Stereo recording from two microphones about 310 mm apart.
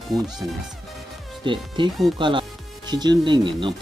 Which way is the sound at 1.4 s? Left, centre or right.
Centre.